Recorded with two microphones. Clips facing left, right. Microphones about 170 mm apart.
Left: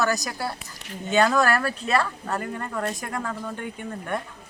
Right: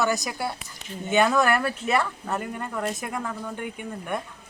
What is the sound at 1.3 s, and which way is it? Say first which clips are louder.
Speech: even; 20° right (ahead or behind).